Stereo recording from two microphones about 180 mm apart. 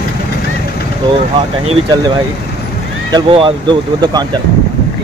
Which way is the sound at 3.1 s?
25° right (ahead or behind).